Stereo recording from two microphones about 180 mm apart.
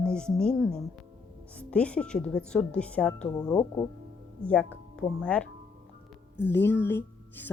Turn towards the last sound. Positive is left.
turn(degrees=10)  # may be behind; listen again after turning